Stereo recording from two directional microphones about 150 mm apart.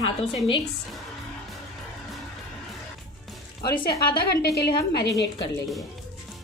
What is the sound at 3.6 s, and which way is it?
Speech, 85° left.